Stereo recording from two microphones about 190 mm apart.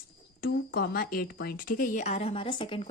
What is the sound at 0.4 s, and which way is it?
Speech, 50° left (ahead or behind).